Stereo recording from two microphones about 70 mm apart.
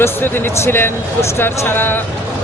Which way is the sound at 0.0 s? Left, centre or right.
Left.